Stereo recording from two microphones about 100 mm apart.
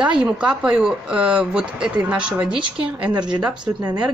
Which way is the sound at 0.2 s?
10° right (ahead or behind).